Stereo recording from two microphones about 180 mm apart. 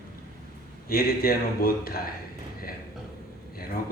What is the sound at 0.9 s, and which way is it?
Speech, 55° left (ahead or behind).